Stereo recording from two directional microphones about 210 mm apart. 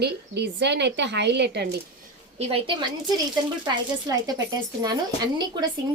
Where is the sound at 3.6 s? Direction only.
20° right (ahead or behind).